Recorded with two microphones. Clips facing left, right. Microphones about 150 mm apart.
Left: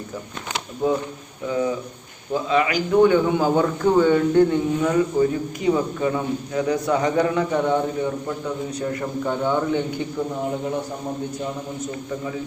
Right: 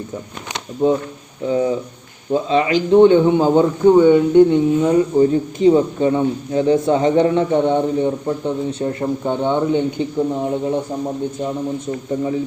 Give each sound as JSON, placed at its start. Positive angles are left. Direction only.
{"t": 0.8, "sound": "speech", "side_deg": -25}